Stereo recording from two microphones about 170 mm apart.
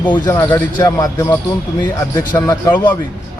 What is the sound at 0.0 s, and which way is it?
Speech, 15° left (ahead or behind).